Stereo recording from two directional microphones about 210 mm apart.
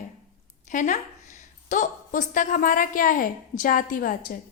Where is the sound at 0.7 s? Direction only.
35° left (ahead or behind).